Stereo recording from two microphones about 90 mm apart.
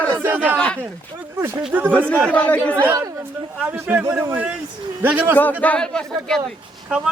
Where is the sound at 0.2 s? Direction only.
20° right (ahead or behind).